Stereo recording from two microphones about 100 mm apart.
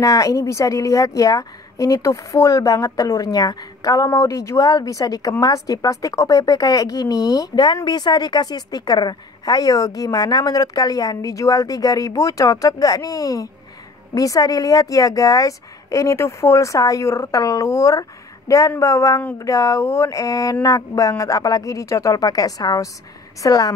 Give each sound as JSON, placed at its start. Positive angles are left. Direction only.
{"t": 0.0, "sound": "a woman's voice", "side_deg": 35}